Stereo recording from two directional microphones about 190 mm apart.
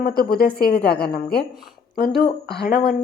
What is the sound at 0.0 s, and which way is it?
A woman's voice, 50° left (ahead or behind).